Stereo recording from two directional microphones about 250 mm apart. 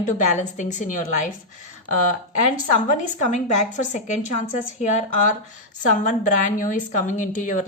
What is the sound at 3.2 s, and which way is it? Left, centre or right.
A woman's voice, left.